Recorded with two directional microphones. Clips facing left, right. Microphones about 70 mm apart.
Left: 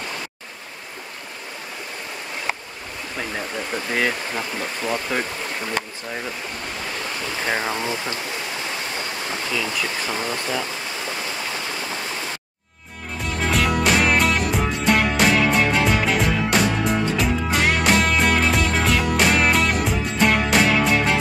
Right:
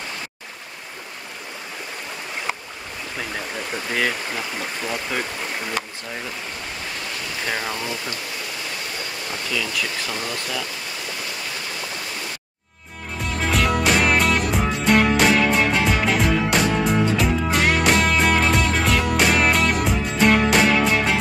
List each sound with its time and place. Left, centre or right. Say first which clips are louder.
3.2 s speech: left 2 dB; centre
5.1 s speech: left 1 dB; centre
7.4 s speech: left 3 dB; left
9.5 s speech: even; left
13.2 s music: even; centre